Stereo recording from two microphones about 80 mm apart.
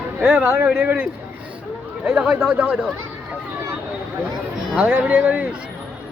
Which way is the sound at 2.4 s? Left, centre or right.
Right.